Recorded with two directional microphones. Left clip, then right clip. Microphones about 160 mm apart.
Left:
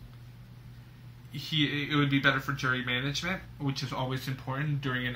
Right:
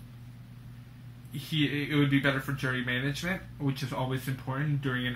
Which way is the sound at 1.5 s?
5° left (ahead or behind).